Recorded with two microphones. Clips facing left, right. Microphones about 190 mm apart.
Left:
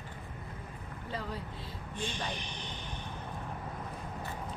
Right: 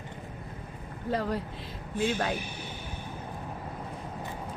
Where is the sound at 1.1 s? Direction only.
75° right (ahead or behind).